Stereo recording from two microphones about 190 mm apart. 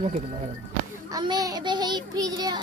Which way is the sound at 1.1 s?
20° right (ahead or behind).